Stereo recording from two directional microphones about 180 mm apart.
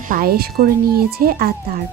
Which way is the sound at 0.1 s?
55° right (ahead or behind).